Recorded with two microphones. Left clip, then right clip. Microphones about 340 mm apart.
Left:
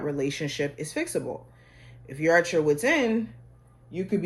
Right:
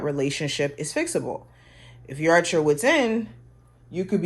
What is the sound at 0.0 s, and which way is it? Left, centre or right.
Speech, right.